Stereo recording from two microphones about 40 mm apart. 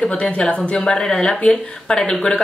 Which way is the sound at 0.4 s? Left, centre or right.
Left.